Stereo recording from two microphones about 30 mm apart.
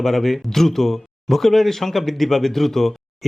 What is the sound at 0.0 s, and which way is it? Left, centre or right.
Speech, centre.